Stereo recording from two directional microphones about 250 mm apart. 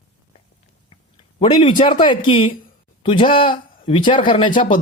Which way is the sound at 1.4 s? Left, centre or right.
Centre.